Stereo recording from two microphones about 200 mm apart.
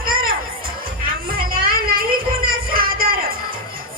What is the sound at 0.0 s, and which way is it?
Music, 45° right (ahead or behind).